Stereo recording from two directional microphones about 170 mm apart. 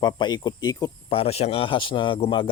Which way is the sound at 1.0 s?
35° left (ahead or behind).